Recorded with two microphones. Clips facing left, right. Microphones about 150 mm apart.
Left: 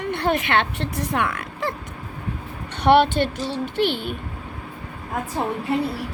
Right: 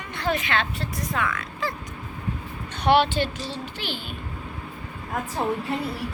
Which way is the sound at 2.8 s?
55° left (ahead or behind).